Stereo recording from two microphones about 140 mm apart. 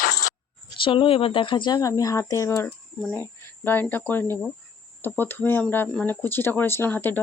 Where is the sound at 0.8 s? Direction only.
40° left (ahead or behind).